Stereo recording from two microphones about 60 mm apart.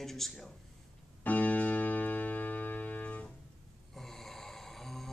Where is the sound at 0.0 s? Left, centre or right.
Centre.